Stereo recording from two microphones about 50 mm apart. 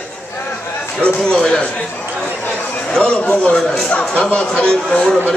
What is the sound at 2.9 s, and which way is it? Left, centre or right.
Speech, centre.